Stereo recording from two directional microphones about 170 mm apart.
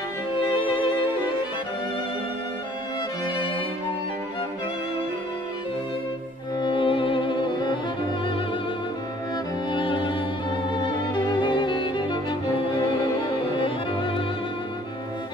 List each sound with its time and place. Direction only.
6.6 s music: 30° left (ahead or behind)
9.7 s music: 30° left (ahead or behind)